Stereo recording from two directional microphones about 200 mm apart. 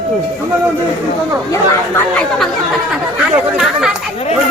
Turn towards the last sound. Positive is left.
turn(degrees=0)  # may be behind; listen again after turning